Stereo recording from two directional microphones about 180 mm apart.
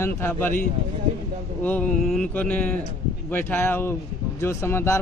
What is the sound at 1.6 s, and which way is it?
Speech, 10° left (ahead or behind).